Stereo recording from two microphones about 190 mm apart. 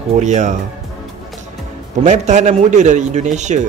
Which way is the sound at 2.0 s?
40° right (ahead or behind).